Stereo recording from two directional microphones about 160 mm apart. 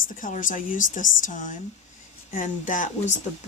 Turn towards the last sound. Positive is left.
turn(degrees=50)  # may be behind; listen again after turning